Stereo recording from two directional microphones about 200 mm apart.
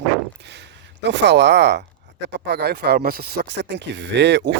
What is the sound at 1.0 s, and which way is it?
Speech, 60° right (ahead or behind).